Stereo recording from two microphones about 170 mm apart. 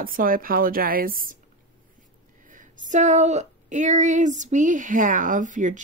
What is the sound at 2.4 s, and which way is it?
Speech, 50° right (ahead or behind).